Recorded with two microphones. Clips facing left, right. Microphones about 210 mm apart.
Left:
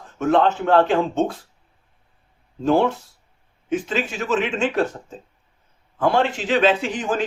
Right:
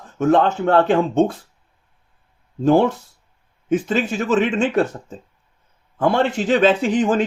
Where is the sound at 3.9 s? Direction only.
50° right (ahead or behind).